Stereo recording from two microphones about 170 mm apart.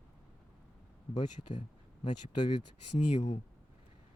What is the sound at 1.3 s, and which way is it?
Speech, 45° left (ahead or behind).